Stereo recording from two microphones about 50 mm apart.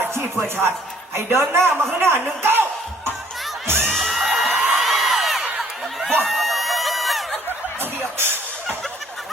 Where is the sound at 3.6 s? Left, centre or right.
Right.